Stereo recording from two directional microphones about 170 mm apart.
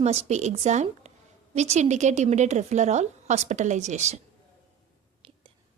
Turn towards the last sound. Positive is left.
turn(degrees=-40)  # may be behind; listen again after turning